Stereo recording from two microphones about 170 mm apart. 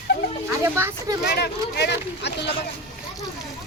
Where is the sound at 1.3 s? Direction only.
75° left (ahead or behind).